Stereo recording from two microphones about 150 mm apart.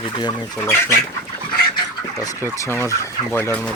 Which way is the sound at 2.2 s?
15° left (ahead or behind).